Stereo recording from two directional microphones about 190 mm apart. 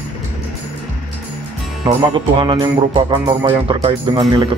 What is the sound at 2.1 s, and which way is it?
Speech, 25° right (ahead or behind).